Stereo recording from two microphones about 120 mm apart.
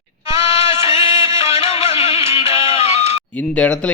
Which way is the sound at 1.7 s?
60° left (ahead or behind).